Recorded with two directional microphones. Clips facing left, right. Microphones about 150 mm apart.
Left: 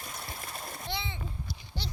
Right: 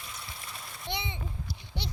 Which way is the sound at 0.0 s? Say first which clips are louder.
Left 3 dB; 45° left (ahead or behind).